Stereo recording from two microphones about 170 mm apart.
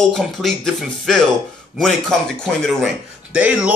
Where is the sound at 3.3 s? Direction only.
5° right (ahead or behind).